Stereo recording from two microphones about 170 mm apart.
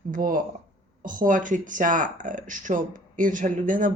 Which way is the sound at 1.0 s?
50° right (ahead or behind).